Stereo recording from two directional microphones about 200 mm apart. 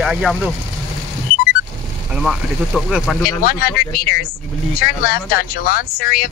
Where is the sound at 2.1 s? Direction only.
5° right (ahead or behind).